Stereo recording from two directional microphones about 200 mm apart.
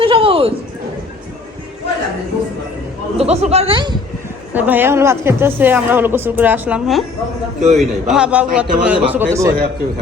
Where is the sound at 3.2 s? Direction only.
30° right (ahead or behind).